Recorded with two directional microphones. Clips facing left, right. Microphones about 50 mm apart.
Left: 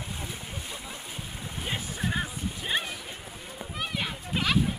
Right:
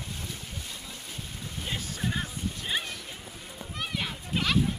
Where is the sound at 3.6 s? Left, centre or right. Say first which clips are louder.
Left 1 dB; centre.